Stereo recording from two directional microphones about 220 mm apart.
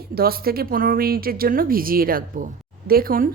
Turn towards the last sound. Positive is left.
turn(degrees=-40)  # may be behind; listen again after turning